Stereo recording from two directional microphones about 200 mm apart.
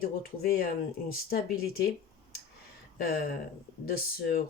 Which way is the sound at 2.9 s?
45° left (ahead or behind).